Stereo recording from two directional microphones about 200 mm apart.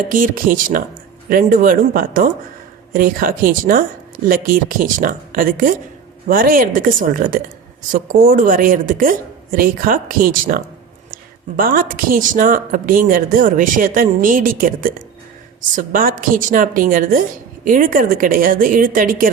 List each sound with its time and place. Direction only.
0.1 s a woman's voice: 45° right (ahead or behind)